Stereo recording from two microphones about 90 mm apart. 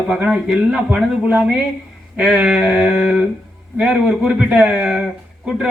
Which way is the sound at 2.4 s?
10° right (ahead or behind).